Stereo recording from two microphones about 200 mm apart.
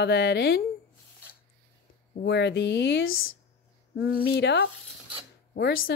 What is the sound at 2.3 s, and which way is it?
Speech, 60° left (ahead or behind).